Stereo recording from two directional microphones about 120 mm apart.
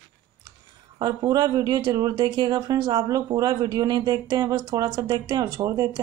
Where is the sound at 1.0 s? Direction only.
35° right (ahead or behind).